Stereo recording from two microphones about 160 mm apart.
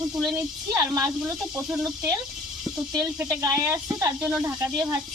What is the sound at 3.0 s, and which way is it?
Speech, 20° right (ahead or behind).